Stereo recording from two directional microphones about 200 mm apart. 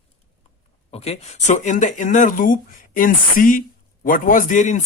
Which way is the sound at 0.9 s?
30° left (ahead or behind).